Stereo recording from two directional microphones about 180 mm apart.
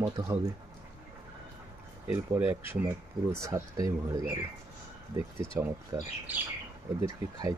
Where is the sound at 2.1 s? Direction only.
10° right (ahead or behind).